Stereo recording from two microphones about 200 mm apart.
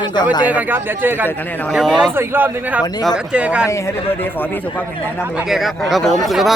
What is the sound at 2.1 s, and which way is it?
Speech, 10° right (ahead or behind).